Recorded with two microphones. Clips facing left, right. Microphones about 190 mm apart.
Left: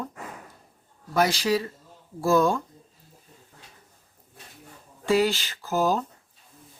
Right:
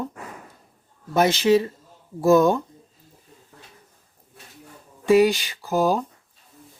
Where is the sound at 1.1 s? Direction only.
20° right (ahead or behind).